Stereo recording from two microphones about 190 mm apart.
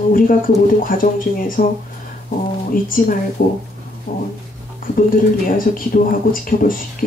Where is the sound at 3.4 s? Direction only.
50° left (ahead or behind).